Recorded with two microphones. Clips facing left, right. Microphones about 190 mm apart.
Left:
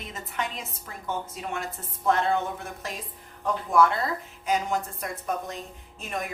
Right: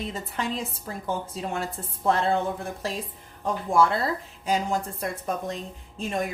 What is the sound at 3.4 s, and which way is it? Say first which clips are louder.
A woman's voice: even; 30° right (ahead or behind).